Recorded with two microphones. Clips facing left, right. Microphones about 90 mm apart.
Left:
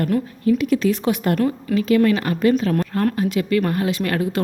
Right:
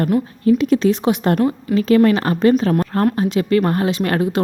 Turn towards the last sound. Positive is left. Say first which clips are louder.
# right 3 dB
turn(degrees=-30)  # may be behind; listen again after turning